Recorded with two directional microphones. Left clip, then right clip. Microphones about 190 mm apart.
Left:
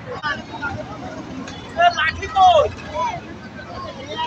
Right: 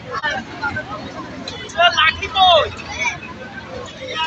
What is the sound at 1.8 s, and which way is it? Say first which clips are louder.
Vehicle: right 3 dB; 65° left (ahead or behind).